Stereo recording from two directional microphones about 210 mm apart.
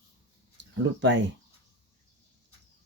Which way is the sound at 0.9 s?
55° right (ahead or behind).